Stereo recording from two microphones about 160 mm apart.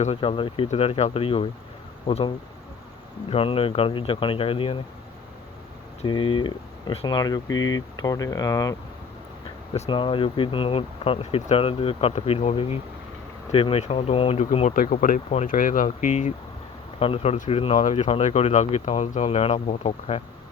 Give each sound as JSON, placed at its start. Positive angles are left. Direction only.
{"t": 0.0, "sound": "speech", "side_deg": 35}
{"t": 6.0, "sound": "speech", "side_deg": 30}
{"t": 9.9, "sound": "speech", "side_deg": 30}
{"t": 14.7, "sound": "speech", "side_deg": 60}
{"t": 17.0, "sound": "speech", "side_deg": 35}
{"t": 17.3, "sound": "speech", "side_deg": 50}